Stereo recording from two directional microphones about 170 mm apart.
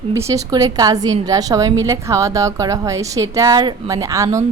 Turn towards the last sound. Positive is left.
turn(degrees=-20)  # may be behind; listen again after turning